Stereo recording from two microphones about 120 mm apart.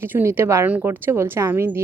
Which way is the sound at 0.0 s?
20° right (ahead or behind).